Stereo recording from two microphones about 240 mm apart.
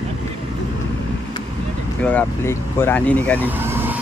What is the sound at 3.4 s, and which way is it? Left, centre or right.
Vehicle, centre.